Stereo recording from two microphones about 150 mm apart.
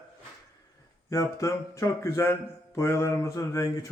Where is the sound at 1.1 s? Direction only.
20° left (ahead or behind).